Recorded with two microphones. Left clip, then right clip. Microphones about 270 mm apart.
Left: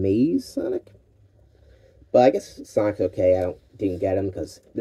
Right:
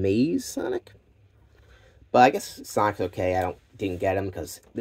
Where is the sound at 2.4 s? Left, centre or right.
Right.